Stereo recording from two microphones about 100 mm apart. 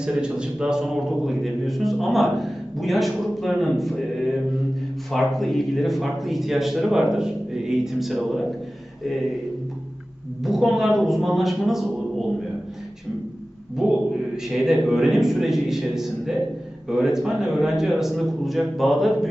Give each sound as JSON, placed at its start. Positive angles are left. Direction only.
{"t": 0.0, "sound": "a man's voice", "side_deg": -10}
{"t": 10.4, "sound": "a man's voice", "side_deg": 0}
{"t": 14.5, "sound": "a man's voice", "side_deg": -5}